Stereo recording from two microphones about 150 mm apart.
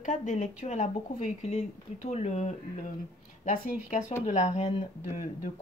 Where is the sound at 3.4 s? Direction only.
65° left (ahead or behind).